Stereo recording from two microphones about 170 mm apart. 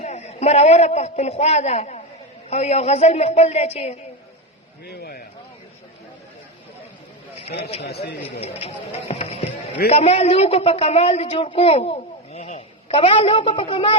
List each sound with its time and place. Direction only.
0.0 s a man's voice: 40° left (ahead or behind)
4.9 s a man's voice: 65° left (ahead or behind)
8.4 s a woman's voice: 35° left (ahead or behind)